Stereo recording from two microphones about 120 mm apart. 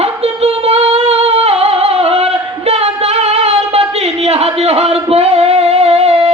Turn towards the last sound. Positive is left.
turn(degrees=-60)  # may be behind; listen again after turning